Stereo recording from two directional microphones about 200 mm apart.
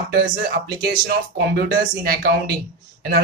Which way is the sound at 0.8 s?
50° right (ahead or behind).